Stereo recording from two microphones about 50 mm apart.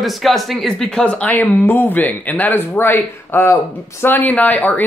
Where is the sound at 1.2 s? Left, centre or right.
Left.